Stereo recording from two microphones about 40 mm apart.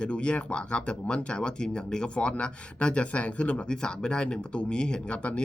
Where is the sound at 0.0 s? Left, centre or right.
Left.